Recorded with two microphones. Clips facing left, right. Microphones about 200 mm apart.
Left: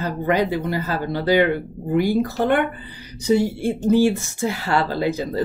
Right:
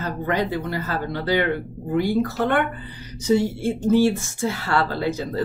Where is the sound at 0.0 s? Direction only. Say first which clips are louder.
Left 3 dB; 10° left (ahead or behind).